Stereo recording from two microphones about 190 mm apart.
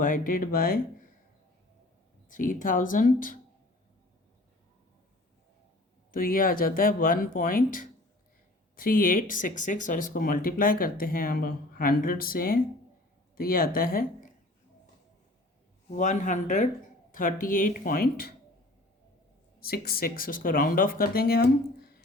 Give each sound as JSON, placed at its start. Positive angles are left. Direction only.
{"t": 0.0, "sound": "speech", "side_deg": 50}
{"t": 2.3, "sound": "speech", "side_deg": 45}
{"t": 6.1, "sound": "speech", "side_deg": 50}
{"t": 15.9, "sound": "speech", "side_deg": 40}
{"t": 19.6, "sound": "speech", "side_deg": 50}